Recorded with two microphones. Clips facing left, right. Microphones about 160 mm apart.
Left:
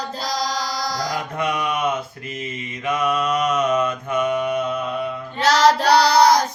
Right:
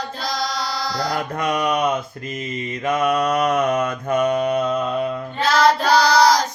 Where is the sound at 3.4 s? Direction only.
55° right (ahead or behind).